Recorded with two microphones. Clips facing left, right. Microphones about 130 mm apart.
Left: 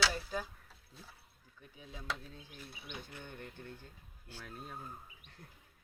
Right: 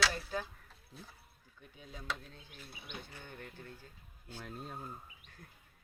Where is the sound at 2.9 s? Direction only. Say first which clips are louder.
Left 1 dB; 15° left (ahead or behind).